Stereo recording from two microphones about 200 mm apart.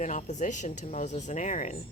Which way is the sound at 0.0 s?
35° left (ahead or behind).